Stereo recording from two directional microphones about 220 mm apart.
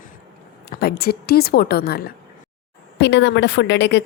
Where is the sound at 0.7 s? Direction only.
45° left (ahead or behind).